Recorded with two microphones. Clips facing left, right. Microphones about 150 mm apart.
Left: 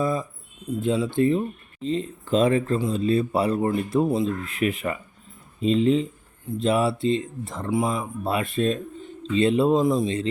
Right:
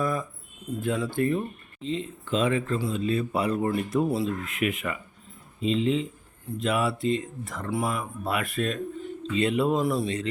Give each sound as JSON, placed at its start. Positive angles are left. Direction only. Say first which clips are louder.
{"t": 0.0, "sound": "a sound", "louder": "left 3 dB", "side_deg": 20}
{"t": 0.7, "sound": "speech", "louder": "left 4 dB", "side_deg": 15}
{"t": 1.8, "sound": "speech", "louder": "left 4 dB", "side_deg": 40}
{"t": 6.6, "sound": "speech", "louder": "left 4 dB", "side_deg": 30}
{"t": 9.8, "sound": "speech", "louder": "left 4 dB", "side_deg": 15}